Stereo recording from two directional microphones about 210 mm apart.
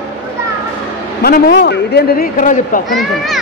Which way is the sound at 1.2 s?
50° left (ahead or behind).